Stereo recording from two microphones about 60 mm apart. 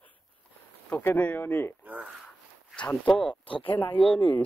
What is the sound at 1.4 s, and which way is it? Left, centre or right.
Speech, left.